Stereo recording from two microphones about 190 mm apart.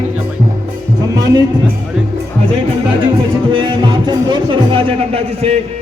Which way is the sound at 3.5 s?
25° right (ahead or behind).